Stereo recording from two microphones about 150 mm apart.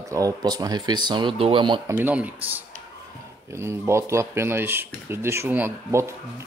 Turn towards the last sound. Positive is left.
turn(degrees=-15)  # may be behind; listen again after turning